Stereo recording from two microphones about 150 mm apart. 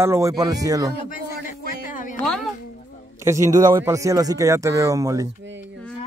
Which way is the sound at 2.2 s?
5° left (ahead or behind).